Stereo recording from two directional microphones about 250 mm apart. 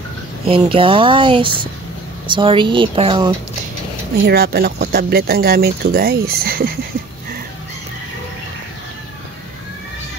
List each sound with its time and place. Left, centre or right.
0.5 s speech: right
4.3 s speech: right